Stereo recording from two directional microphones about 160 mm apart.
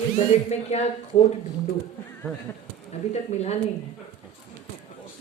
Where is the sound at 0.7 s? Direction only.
45° left (ahead or behind).